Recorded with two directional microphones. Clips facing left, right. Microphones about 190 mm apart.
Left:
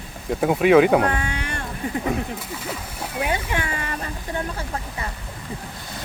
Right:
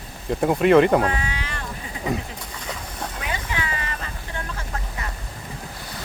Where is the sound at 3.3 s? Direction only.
50° left (ahead or behind).